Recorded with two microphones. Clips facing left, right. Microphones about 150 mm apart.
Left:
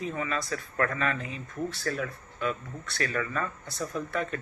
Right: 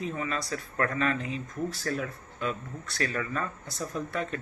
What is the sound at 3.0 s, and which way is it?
Speech, 35° right (ahead or behind).